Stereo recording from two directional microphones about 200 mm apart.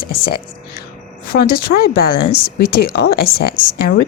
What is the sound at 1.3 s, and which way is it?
A woman's voice, 50° left (ahead or behind).